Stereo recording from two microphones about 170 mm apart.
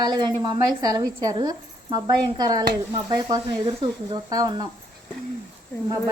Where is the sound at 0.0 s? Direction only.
25° right (ahead or behind).